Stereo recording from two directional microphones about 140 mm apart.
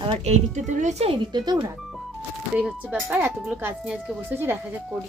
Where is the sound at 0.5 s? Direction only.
60° right (ahead or behind).